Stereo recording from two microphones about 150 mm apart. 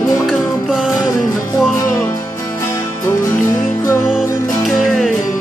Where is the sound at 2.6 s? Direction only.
20° left (ahead or behind).